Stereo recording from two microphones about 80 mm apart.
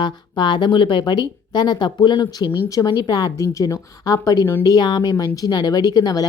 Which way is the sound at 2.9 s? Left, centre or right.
Left.